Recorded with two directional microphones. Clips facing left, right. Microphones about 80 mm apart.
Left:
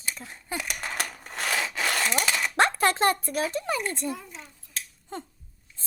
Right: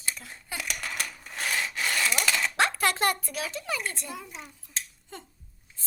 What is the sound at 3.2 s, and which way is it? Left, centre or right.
Speech, left.